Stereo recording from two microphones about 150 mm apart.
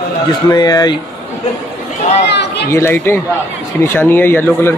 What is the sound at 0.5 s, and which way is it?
Speech, 25° left (ahead or behind).